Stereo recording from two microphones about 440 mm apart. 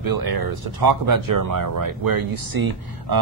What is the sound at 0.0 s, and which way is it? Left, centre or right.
Speech, right.